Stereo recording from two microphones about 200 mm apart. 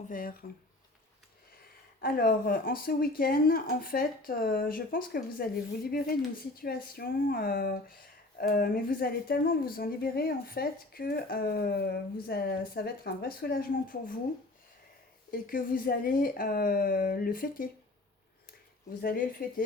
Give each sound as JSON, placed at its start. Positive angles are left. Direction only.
{"t": 0.1, "sound": "speech", "side_deg": 45}
{"t": 2.0, "sound": "speech", "side_deg": 45}
{"t": 15.3, "sound": "speech", "side_deg": 45}
{"t": 19.0, "sound": "speech", "side_deg": 45}